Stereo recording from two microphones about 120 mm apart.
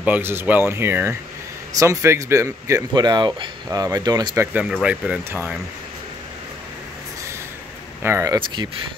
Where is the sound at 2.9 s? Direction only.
35° right (ahead or behind).